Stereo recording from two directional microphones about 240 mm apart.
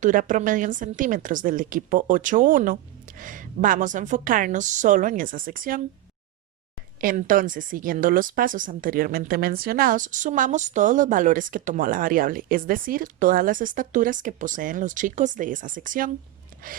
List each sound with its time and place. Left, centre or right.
0.0 s a woman's voice: right
7.0 s a woman's voice: right